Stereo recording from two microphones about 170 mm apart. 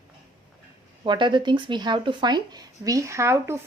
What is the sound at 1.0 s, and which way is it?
Speech, 25° right (ahead or behind).